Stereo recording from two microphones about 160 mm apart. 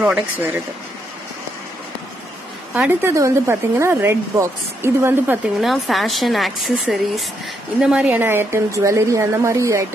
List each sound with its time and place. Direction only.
0.0 s a woman's voice: 5° right (ahead or behind)
2.7 s a woman's voice: 10° right (ahead or behind)
5.6 s a woman's voice: centre (ahead or behind); by 9.8 s 20° right (ahead or behind)